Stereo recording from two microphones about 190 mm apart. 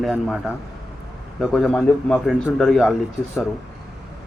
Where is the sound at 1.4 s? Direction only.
Centre (ahead or behind).